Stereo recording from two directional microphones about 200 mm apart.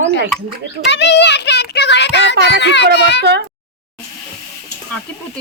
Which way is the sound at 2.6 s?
60° left (ahead or behind).